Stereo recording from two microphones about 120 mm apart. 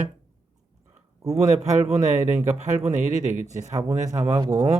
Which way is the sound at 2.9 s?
90° right.